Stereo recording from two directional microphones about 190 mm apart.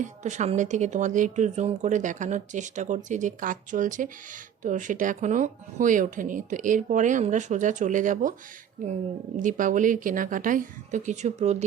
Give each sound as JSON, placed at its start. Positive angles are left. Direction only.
{"t": 0.0, "sound": "speech", "side_deg": -40}